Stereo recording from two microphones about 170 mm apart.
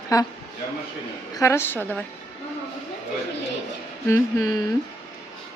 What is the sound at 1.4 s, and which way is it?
Speech, 15° left (ahead or behind).